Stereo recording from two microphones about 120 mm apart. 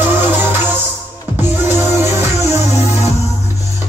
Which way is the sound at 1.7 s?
20° right (ahead or behind).